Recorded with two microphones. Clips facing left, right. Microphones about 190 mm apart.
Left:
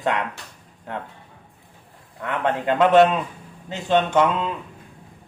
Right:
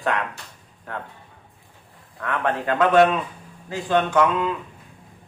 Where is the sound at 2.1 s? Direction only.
20° left (ahead or behind).